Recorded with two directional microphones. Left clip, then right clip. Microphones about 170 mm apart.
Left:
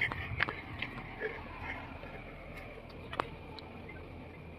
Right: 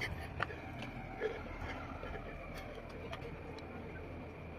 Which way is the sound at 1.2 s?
20° right (ahead or behind).